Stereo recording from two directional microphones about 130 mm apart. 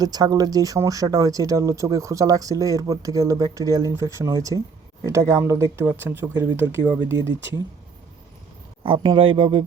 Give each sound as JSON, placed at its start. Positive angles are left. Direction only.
{"t": 0.0, "sound": "speech", "side_deg": -30}
{"t": 8.8, "sound": "speech", "side_deg": -40}